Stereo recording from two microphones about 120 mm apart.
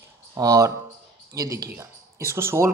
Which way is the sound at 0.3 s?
25° right (ahead or behind).